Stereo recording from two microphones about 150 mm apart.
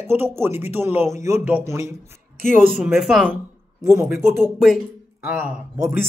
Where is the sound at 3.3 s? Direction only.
20° right (ahead or behind).